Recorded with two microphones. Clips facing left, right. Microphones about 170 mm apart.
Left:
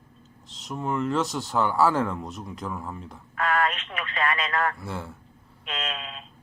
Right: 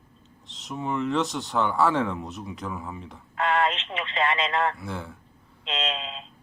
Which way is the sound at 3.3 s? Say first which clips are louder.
Right 1 dB; 25° right (ahead or behind).